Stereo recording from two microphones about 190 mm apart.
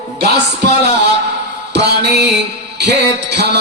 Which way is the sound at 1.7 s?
60° right (ahead or behind).